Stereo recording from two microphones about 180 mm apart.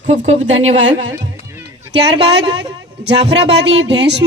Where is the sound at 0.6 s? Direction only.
90° right.